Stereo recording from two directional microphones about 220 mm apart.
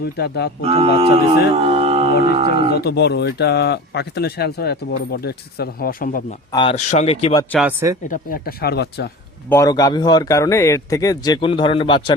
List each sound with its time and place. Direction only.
0.0 s speech: 50° left (ahead or behind)
0.6 s speech: 25° right (ahead or behind)
1.7 s mantra: 25° right (ahead or behind)
2.2 s speech: 25° right (ahead or behind)
2.7 s speech: 50° left (ahead or behind)
6.5 s speech: 25° left (ahead or behind)
7.6 s speech: 10° right (ahead or behind)
8.0 s speech: 40° left (ahead or behind)
9.5 s speech: 15° left (ahead or behind)